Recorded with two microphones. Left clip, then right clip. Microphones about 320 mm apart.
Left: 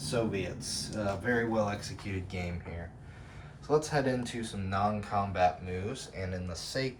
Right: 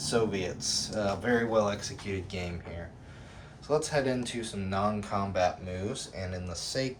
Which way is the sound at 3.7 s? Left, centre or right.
Centre.